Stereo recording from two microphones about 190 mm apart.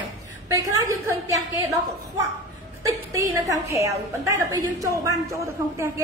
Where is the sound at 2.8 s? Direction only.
15° right (ahead or behind).